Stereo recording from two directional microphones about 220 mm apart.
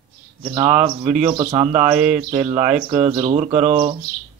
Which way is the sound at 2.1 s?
35° right (ahead or behind).